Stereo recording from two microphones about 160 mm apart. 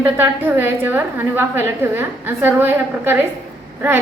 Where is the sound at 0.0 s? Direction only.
10° right (ahead or behind).